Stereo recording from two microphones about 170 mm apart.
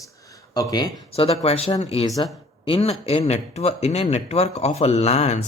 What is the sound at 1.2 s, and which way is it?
Speech, 35° left (ahead or behind).